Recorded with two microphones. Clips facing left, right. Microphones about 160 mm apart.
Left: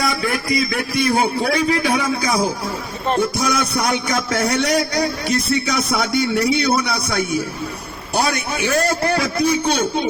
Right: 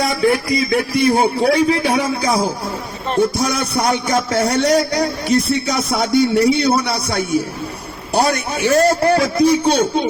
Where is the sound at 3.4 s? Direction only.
30° right (ahead or behind).